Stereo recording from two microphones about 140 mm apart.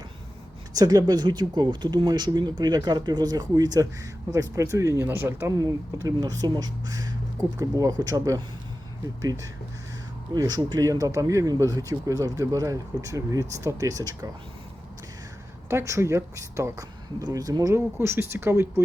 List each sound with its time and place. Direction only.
0.7 s speech: 25° right (ahead or behind)
5.5 s speech: 25° right (ahead or behind)
10.3 s speech: 30° right (ahead or behind)
15.7 s speech: 20° right (ahead or behind)